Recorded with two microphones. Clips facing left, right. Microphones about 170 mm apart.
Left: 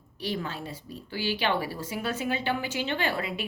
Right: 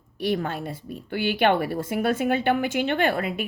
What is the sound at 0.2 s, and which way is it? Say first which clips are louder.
A woman's voice: right 7 dB; 55° right (ahead or behind).